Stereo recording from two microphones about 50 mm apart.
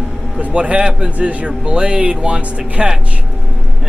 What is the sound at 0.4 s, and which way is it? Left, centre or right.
A man's voice, right.